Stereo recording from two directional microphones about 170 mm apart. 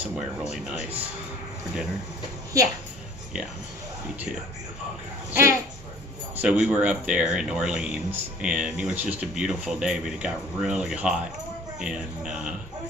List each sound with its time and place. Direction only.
0.1 s speech: 5° right (ahead or behind)
2.5 s a woman's voice: 20° right (ahead or behind)
5.3 s speech: 15° right (ahead or behind)
6.3 s speech: 5° right (ahead or behind)